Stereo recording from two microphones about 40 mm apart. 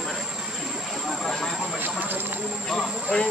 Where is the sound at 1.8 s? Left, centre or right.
Right.